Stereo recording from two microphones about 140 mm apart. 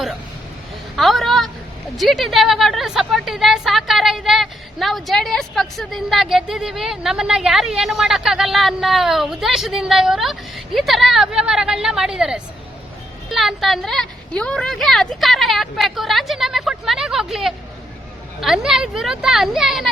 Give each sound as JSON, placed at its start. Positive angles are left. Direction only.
{"t": 0.9, "sound": "a woman's voice", "side_deg": 0}